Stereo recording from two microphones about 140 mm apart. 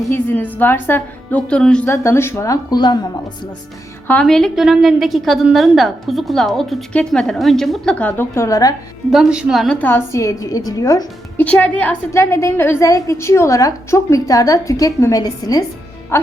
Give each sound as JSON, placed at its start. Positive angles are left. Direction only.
{"t": 0.1, "sound": "a woman's voice", "side_deg": 10}
{"t": 1.9, "sound": "a woman's voice", "side_deg": 15}
{"t": 4.0, "sound": "a woman's voice", "side_deg": 10}
{"t": 9.0, "sound": "a woman's voice", "side_deg": -5}
{"t": 9.7, "sound": "a woman's voice", "side_deg": 15}
{"t": 11.3, "sound": "a woman's voice", "side_deg": 10}